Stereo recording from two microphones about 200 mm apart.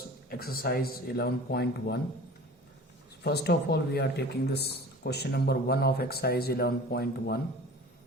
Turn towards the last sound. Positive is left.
turn(degrees=50)  # may be behind; listen again after turning